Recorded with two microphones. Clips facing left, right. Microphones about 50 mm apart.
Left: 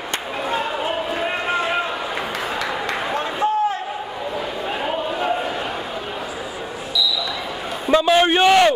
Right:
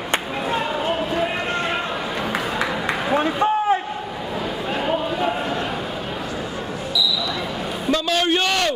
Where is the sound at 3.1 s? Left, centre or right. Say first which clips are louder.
Right 3 dB; centre.